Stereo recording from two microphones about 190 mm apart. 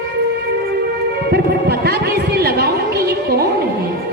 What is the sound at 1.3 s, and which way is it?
Chatter, 55° right (ahead or behind).